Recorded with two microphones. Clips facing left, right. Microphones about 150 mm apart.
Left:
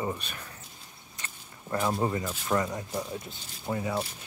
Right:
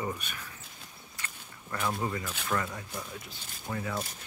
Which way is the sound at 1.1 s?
25° left (ahead or behind).